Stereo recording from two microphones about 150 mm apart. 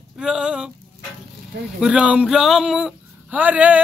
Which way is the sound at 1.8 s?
5° right (ahead or behind).